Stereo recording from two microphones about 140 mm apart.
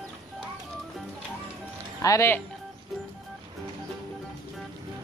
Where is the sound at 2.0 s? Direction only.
20° left (ahead or behind).